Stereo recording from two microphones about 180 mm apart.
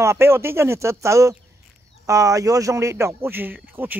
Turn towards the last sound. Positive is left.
turn(degrees=-10)  # may be behind; listen again after turning